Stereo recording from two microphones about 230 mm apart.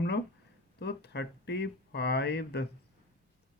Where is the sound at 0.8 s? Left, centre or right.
Left.